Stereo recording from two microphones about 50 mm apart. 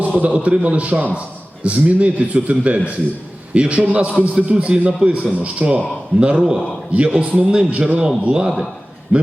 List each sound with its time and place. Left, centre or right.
0.2 s a man's voice: right